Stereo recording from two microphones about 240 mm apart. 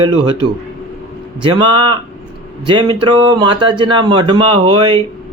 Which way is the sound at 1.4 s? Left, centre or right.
Centre.